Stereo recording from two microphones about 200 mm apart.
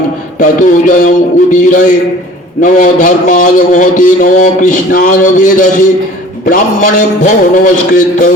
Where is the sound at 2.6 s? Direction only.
40° left (ahead or behind).